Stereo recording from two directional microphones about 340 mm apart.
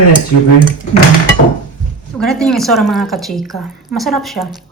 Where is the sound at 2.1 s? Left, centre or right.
Centre.